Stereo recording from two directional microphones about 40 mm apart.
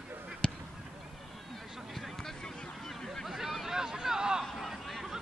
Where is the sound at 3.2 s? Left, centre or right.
Centre.